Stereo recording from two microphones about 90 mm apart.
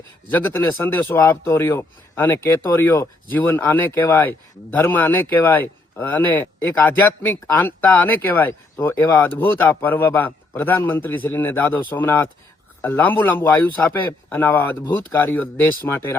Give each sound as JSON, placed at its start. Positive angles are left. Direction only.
{"t": 0.9, "sound": "speech", "side_deg": 20}